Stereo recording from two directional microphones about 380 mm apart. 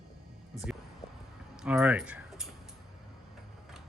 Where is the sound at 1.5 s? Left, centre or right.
Centre.